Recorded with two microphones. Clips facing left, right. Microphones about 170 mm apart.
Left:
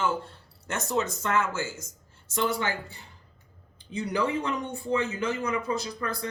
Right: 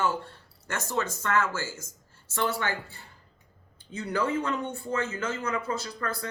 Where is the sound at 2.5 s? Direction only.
15° left (ahead or behind).